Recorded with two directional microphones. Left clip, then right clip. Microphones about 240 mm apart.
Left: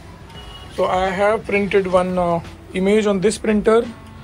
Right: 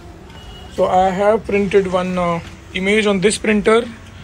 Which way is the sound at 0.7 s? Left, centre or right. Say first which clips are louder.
Right 4 dB; centre.